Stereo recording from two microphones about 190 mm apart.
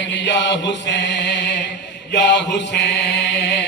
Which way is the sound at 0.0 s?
70° left (ahead or behind).